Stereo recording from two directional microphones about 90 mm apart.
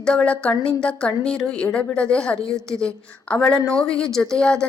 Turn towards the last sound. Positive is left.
turn(degrees=10)  # may be behind; listen again after turning